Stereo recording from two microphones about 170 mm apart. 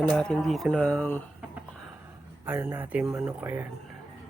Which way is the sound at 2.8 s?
5° right (ahead or behind).